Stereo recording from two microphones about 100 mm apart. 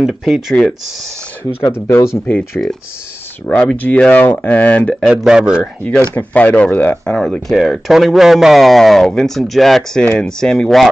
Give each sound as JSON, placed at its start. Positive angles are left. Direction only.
{"t": 0.0, "sound": "a man's voice", "side_deg": -5}
{"t": 1.6, "sound": "speech", "side_deg": 25}
{"t": 5.1, "sound": "speech", "side_deg": -5}
{"t": 6.1, "sound": "speech", "side_deg": 15}
{"t": 7.2, "sound": "speech", "side_deg": 10}
{"t": 7.5, "sound": "a man's voice", "side_deg": -5}